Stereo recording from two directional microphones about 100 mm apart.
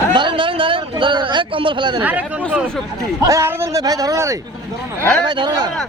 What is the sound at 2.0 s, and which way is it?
Speech, 15° right (ahead or behind).